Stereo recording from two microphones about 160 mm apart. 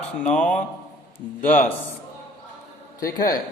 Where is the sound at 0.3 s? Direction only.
55° left (ahead or behind).